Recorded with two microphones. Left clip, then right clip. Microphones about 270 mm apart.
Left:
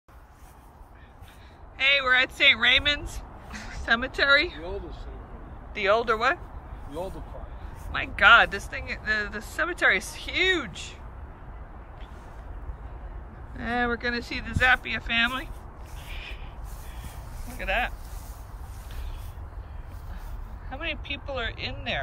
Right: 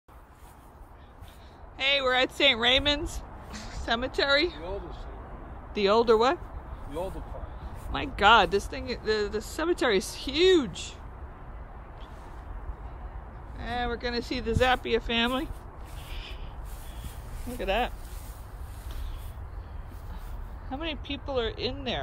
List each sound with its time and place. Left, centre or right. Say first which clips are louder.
1.8 s speech: left 3 dB; centre
4.6 s speech: left 1 dB; right
5.8 s speech: right 1 dB; centre
13.6 s speech: left 4 dB; centre
16.1 s a sound: left 4 dB; centre
17.6 s speech: left 1 dB; centre
20.7 s speech: left 2 dB; centre